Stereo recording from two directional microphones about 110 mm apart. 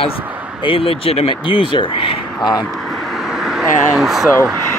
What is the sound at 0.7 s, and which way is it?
Speech, 60° left (ahead or behind).